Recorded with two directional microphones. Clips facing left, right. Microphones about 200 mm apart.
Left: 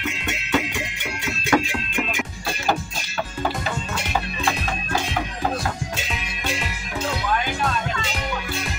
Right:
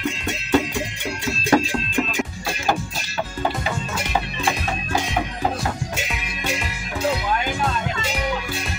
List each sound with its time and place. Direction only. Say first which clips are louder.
0.3 s music: right 4 dB; 35° right (ahead or behind)